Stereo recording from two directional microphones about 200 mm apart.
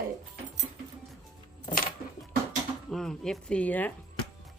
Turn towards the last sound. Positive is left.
turn(degrees=10)  # may be behind; listen again after turning